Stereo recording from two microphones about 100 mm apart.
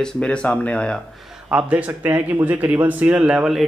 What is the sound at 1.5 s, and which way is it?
A man's voice, 15° right (ahead or behind).